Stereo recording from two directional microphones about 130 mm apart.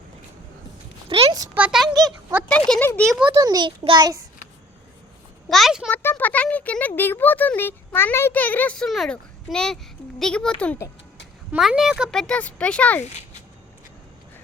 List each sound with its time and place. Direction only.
1.1 s a sound: 40° right (ahead or behind)
1.5 s a sound: 5° right (ahead or behind)
1.9 s speech: 30° right (ahead or behind)
2.5 s speech: 10° left (ahead or behind)
3.3 s a child's voice: 30° right (ahead or behind)
5.5 s speech: centre (ahead or behind)
5.9 s speech: 15° left (ahead or behind)
10.8 s speech: 20° left (ahead or behind)
11.5 s speech: 5° right (ahead or behind); by 13.1 s 10° left (ahead or behind)